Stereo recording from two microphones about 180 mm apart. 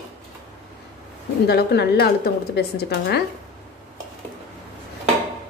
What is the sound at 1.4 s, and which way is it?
A woman's voice, 60° left (ahead or behind).